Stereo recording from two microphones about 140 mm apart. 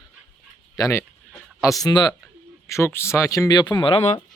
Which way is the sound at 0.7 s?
25° left (ahead or behind).